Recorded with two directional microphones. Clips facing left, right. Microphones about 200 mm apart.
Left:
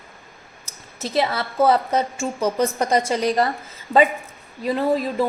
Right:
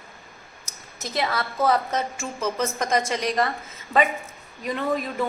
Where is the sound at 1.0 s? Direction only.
30° left (ahead or behind).